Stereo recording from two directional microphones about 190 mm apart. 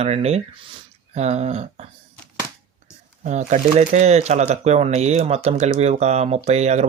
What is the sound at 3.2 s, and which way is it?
Speech, 40° right (ahead or behind).